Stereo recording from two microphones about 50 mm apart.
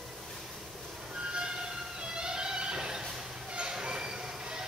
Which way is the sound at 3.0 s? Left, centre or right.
Centre.